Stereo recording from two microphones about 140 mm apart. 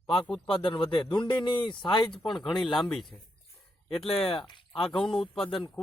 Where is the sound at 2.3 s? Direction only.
Centre (ahead or behind).